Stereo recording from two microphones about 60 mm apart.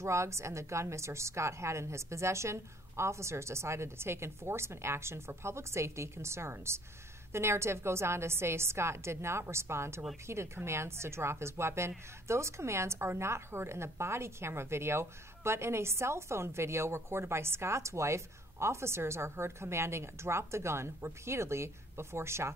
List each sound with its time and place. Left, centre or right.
0.0 s a woman's voice: right